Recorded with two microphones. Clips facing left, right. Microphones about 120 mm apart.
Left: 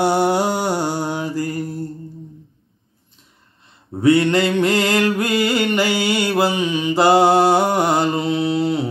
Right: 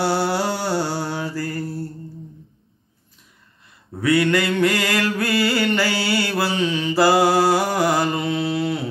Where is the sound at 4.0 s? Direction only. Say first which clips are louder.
Left 4 dB; 25° left (ahead or behind).